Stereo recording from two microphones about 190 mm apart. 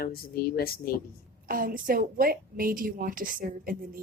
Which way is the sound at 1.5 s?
50° right (ahead or behind).